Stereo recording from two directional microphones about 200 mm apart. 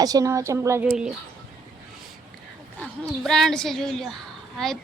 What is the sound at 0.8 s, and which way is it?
Speech, 5° right (ahead or behind).